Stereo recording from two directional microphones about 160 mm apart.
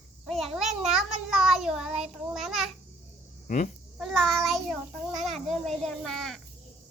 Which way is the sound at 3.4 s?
55° left (ahead or behind).